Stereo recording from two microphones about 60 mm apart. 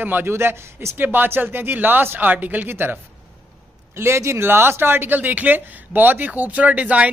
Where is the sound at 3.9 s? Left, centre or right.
Right.